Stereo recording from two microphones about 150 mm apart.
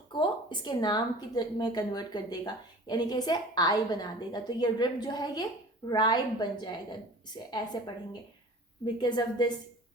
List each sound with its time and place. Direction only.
0.1 s a woman's voice: 30° left (ahead or behind)
9.0 s a woman's voice: 30° left (ahead or behind)